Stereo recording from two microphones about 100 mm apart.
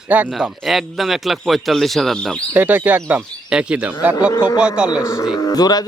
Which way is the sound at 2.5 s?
20° right (ahead or behind).